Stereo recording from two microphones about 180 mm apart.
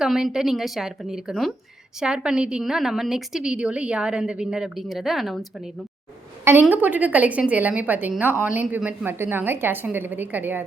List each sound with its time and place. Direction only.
0.0 s a woman's voice: centre (ahead or behind)
6.4 s a woman's voice: 10° right (ahead or behind)